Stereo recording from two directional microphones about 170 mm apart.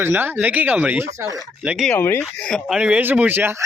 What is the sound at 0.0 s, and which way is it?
Speech, 15° right (ahead or behind).